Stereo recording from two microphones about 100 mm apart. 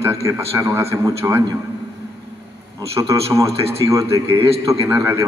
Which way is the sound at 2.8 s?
30° right (ahead or behind).